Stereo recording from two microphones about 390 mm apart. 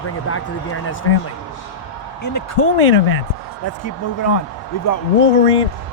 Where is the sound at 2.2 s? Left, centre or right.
Left.